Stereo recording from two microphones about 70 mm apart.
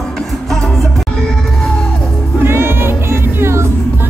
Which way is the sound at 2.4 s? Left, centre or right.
Right.